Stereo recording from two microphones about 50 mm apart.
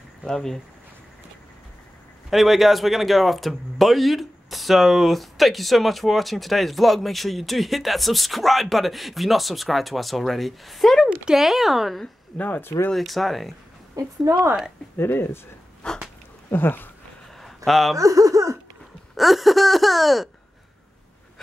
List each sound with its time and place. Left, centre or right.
0.3 s speech: centre
2.3 s speech: centre
12.4 s speech: left
12.9 s speech: centre
14.0 s speech: right
15.0 s speech: left
15.8 s speech: centre
16.5 s speech: left
17.6 s speech: centre
17.9 s speech: right
19.1 s speech: centre